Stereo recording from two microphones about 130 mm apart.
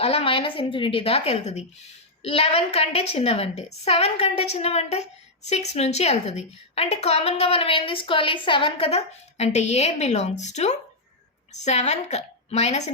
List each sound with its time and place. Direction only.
0.0 s a woman's voice: 50° left (ahead or behind)